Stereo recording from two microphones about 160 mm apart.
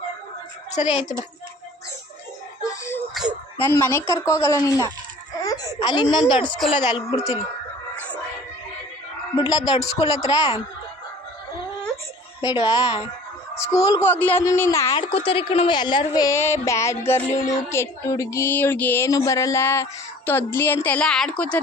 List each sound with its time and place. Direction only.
0.8 s a child's voice: 45° left (ahead or behind)
2.6 s music: 15° left (ahead or behind)
3.7 s speech: 15° left (ahead or behind)
5.4 s a sound: 20° left (ahead or behind)
6.2 s a woman's voice: 30° left (ahead or behind)
9.3 s a woman's voice: 25° left (ahead or behind)
12.5 s a woman's voice: 25° left (ahead or behind)
14.9 s a woman's voice: 35° left (ahead or behind); by 21.6 s 5° left (ahead or behind)